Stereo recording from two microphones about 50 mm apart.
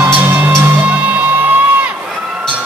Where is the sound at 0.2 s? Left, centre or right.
Right.